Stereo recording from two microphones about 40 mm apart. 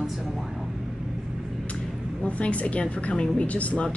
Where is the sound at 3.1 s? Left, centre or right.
Left.